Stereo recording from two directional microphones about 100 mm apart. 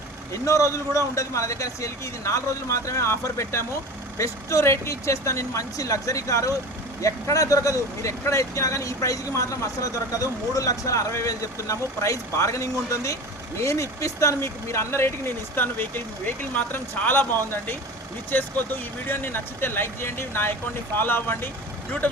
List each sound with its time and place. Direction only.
0.4 s speech: 30° left (ahead or behind)